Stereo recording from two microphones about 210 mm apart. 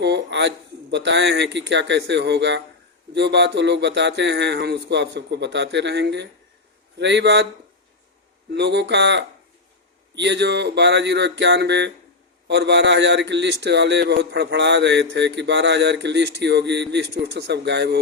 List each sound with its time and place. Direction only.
0.0 s a man's voice: 55° right (ahead or behind)
8.5 s a man's voice: 55° right (ahead or behind)